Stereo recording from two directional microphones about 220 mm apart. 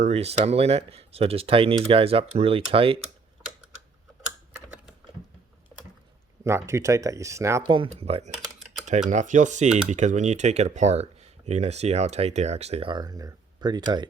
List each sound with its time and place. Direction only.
0.0 s speech: 30° right (ahead or behind)
6.4 s speech: 10° right (ahead or behind)